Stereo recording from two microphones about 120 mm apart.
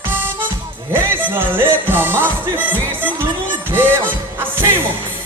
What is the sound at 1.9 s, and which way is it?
Music, 20° right (ahead or behind).